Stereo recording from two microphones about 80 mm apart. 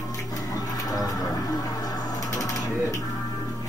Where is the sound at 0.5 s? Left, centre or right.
Left.